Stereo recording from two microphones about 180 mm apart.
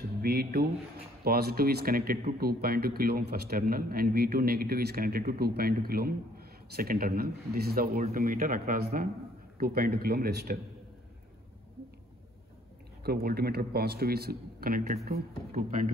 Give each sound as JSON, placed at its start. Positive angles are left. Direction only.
{"t": 0.0, "sound": "speech", "side_deg": -60}
{"t": 13.0, "sound": "speech", "side_deg": -60}